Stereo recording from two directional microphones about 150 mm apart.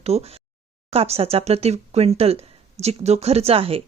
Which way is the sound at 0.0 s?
45° right (ahead or behind).